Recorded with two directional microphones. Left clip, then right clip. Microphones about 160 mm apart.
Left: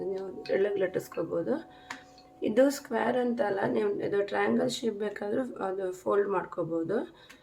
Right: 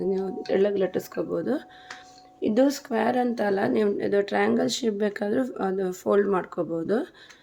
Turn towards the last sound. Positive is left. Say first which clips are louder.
# right 4 dB
turn(degrees=-40)  # may be behind; listen again after turning